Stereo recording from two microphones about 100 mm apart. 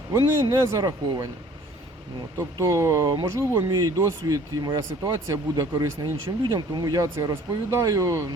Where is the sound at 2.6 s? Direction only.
30° right (ahead or behind).